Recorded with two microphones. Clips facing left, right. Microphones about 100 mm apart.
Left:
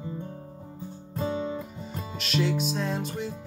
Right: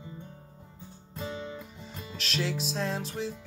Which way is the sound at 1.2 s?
40° left (ahead or behind).